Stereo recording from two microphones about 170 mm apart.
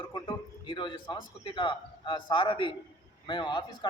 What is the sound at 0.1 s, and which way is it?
A man's voice, 25° left (ahead or behind).